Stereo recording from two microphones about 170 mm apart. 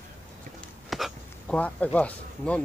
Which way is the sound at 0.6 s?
Centre (ahead or behind).